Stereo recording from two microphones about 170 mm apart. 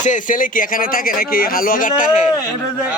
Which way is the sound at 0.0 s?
50° left (ahead or behind).